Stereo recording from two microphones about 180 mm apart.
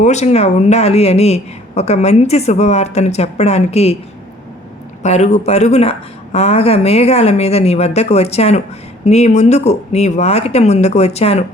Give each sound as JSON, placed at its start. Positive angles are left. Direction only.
{"t": 0.0, "sound": "speech", "side_deg": 40}
{"t": 5.0, "sound": "speech", "side_deg": 40}